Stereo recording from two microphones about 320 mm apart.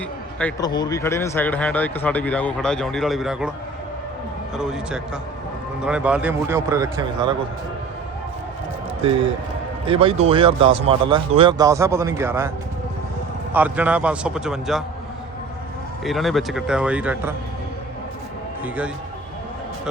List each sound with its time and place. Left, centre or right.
0.3 s speech: centre
4.5 s speech: centre
9.8 s speech: centre
13.5 s speech: centre
16.0 s speech: centre